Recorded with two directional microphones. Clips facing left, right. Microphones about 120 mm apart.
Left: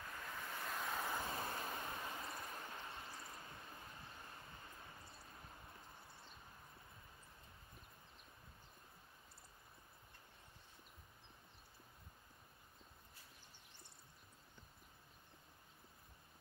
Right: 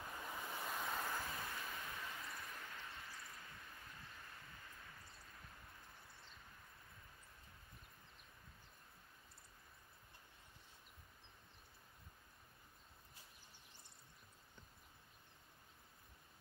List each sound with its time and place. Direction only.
0.0 s vehicle: 15° right (ahead or behind); by 1.1 s centre (ahead or behind)
1.1 s vehicle: 25° left (ahead or behind)